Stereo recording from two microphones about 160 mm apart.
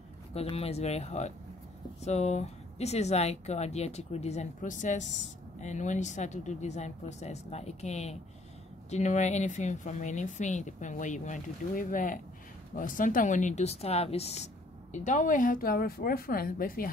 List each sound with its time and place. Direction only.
0.3 s a woman's voice: 40° left (ahead or behind); by 16.9 s 65° left (ahead or behind)